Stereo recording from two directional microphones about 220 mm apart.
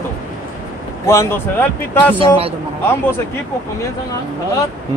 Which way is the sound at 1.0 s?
10° left (ahead or behind).